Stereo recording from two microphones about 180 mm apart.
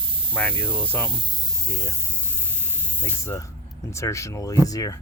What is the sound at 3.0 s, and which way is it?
Speech, 15° left (ahead or behind).